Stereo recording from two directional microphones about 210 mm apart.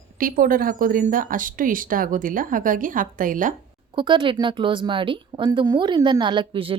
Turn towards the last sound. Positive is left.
turn(degrees=-25)  # may be behind; listen again after turning